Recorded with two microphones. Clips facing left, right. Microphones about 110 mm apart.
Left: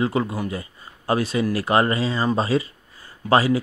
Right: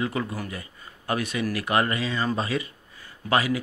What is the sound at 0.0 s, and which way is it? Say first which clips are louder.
Speech: left 6 dB; 30° left (ahead or behind).